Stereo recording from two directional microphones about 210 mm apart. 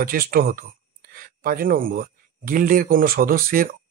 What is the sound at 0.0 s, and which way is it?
Speech, 45° right (ahead or behind).